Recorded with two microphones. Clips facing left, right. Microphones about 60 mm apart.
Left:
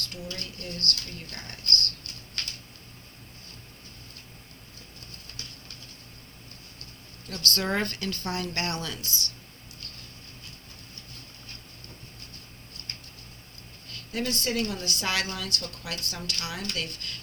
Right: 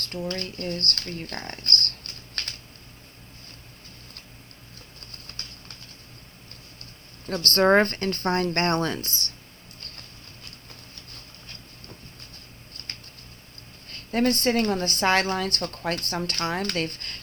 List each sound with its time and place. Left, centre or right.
0.0 s a woman's voice: right
7.3 s a woman's voice: right
9.8 s vehicle: right
13.8 s a woman's voice: right